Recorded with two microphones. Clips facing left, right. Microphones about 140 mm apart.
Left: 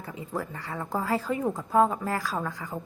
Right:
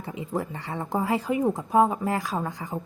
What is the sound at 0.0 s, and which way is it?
A woman's voice, 25° right (ahead or behind).